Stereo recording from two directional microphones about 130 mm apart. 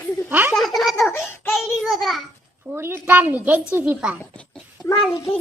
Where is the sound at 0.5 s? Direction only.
Centre (ahead or behind).